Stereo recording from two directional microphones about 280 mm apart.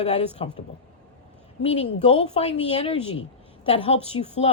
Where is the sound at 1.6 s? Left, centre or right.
Left.